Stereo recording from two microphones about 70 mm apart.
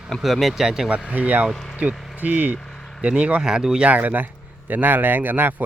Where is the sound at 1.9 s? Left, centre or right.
Centre.